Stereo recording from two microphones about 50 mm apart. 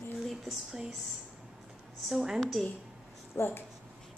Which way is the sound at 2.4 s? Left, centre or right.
Centre.